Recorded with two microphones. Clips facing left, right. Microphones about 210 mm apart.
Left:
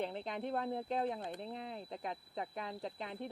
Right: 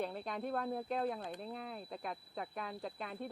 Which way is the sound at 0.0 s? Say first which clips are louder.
Even; 20° left (ahead or behind).